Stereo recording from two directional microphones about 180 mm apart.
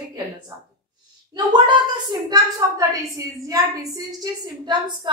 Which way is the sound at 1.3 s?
25° right (ahead or behind).